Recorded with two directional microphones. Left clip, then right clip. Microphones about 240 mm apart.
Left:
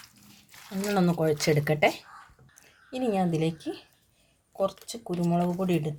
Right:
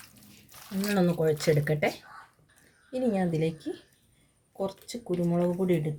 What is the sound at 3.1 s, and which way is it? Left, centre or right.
Speech, left.